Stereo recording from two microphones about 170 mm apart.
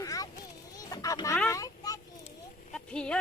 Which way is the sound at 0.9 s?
20° left (ahead or behind).